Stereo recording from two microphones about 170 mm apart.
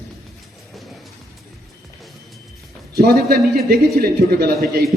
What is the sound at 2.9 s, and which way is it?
A man's voice, 65° right (ahead or behind).